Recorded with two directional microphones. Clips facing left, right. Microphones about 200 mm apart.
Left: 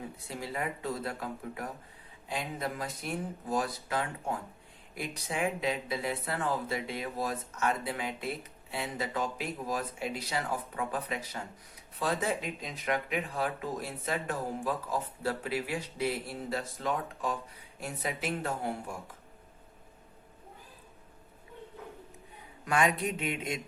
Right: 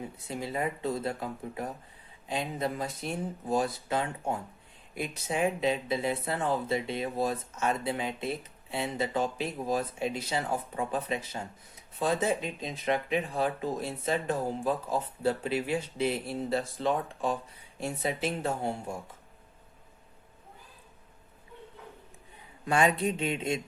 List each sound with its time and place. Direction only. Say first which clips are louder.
0.0 s speech: right 3 dB; 20° right (ahead or behind)
22.6 s speech: right 3 dB; 30° right (ahead or behind)